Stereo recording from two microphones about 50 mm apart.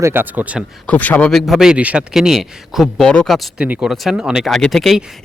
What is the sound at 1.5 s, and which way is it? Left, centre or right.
Speech, centre.